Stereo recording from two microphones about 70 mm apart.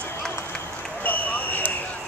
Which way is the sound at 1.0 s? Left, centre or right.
Left.